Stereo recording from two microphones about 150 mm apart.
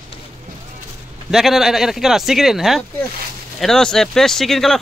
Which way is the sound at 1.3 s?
Centre (ahead or behind).